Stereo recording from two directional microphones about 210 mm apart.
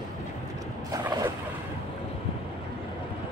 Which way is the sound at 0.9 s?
15° right (ahead or behind).